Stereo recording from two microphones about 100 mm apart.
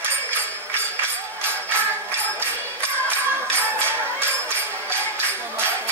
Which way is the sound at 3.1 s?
20° right (ahead or behind).